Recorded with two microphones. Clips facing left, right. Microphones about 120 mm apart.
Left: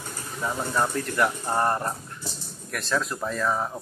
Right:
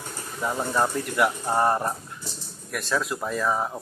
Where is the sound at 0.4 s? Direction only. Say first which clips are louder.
Right 2 dB; 10° right (ahead or behind).